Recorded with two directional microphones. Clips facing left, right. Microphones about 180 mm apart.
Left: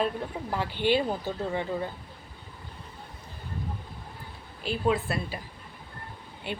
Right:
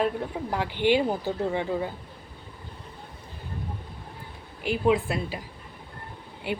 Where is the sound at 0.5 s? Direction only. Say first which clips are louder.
Right 2 dB; 15° right (ahead or behind).